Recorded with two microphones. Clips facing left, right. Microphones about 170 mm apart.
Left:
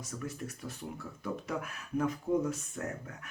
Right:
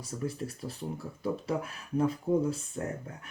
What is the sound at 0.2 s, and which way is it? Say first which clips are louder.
Speech: right 6 dB; 30° right (ahead or behind).